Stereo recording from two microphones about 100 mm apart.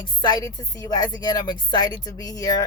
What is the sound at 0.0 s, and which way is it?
Speech, 50° left (ahead or behind).